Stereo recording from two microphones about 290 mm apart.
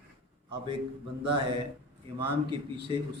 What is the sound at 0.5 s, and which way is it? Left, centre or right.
Speech, centre.